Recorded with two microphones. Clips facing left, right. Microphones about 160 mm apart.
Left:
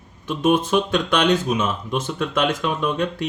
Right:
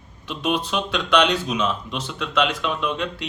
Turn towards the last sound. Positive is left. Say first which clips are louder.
# left 4 dB
turn(degrees=45)  # may be behind; listen again after turning